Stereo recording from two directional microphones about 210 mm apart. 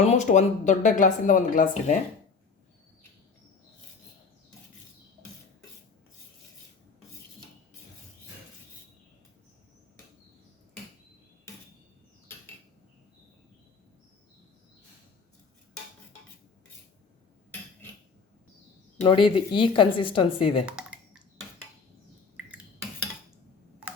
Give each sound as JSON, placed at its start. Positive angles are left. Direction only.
{"t": 0.0, "sound": "speech", "side_deg": 30}
{"t": 19.0, "sound": "speech", "side_deg": 25}
{"t": 20.7, "sound": "a sound", "side_deg": -5}